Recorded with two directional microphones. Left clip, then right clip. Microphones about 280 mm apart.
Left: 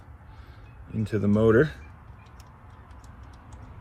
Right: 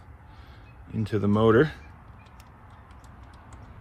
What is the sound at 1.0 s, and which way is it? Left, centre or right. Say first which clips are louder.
Speech: even; right.